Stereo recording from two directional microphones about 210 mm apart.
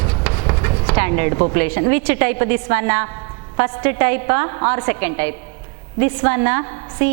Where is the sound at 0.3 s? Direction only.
20° right (ahead or behind).